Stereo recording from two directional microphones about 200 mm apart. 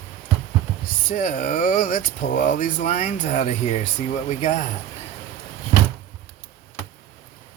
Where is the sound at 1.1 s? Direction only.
45° left (ahead or behind).